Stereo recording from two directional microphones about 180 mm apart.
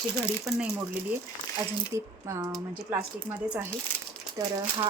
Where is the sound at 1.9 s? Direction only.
15° right (ahead or behind).